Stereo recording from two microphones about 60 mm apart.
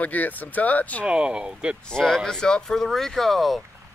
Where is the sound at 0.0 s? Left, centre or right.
Left.